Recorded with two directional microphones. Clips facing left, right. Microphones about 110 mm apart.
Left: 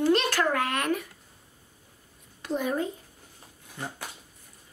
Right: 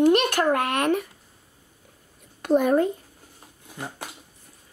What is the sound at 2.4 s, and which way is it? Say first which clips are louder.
Speech: right 9 dB; 55° right (ahead or behind).